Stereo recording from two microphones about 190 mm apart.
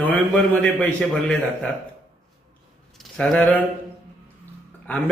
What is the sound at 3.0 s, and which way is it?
Speech, 5° left (ahead or behind).